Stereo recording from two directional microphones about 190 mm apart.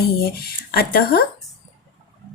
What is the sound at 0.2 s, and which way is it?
Speech, 55° left (ahead or behind).